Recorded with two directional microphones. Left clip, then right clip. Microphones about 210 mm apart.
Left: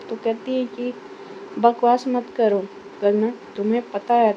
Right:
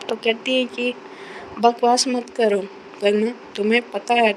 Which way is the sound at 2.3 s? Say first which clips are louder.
Even; centre (ahead or behind).